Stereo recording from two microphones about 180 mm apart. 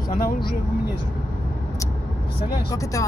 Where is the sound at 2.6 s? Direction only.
20° left (ahead or behind).